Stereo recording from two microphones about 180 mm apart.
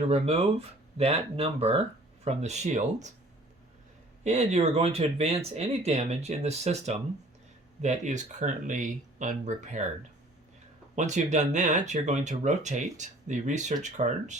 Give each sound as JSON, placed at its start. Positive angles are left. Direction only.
{"t": 0.1, "sound": "speech", "side_deg": -35}
{"t": 4.2, "sound": "speech", "side_deg": -40}
{"t": 10.9, "sound": "speech", "side_deg": -40}